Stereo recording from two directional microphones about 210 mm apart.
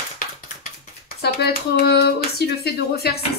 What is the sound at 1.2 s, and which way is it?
Speech, 50° left (ahead or behind).